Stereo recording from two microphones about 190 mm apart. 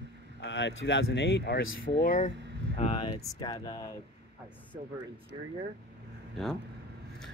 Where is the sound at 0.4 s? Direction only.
70° left (ahead or behind); by 2.3 s 45° left (ahead or behind).